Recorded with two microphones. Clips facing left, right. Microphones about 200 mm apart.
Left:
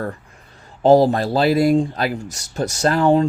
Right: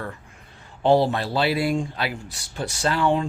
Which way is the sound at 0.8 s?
40° left (ahead or behind).